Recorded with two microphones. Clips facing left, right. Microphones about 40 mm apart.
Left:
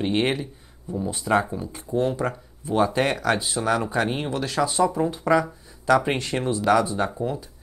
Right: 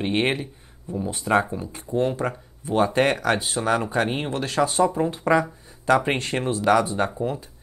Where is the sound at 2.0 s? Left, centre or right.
Right.